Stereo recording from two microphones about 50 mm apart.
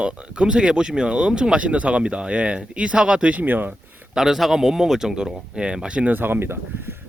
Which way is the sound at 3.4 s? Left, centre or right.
Right.